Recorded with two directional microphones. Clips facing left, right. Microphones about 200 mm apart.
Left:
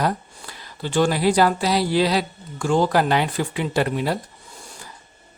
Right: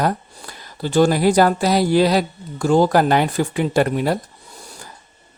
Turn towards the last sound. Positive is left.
turn(degrees=-45)  # may be behind; listen again after turning